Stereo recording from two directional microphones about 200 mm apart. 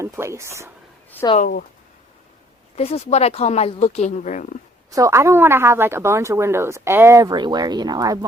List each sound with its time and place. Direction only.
0.0 s a woman's voice: 15° right (ahead or behind)
1.4 s speech: 50° left (ahead or behind)
2.7 s speech: 30° left (ahead or behind)
4.9 s a woman's voice: 15° right (ahead or behind)